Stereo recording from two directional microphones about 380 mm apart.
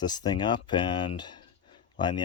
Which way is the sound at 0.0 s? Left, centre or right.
Centre.